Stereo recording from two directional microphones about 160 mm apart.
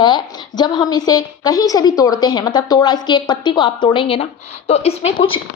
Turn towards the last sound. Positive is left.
turn(degrees=40)  # may be behind; listen again after turning